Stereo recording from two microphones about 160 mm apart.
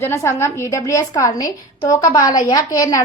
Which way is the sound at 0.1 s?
15° left (ahead or behind).